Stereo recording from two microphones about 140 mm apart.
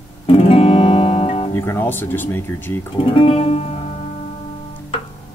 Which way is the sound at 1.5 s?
15° left (ahead or behind).